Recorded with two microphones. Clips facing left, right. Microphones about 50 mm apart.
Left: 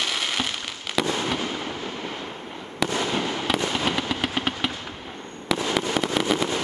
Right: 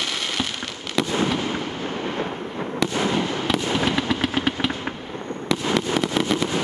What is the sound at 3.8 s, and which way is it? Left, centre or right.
Vehicle, centre.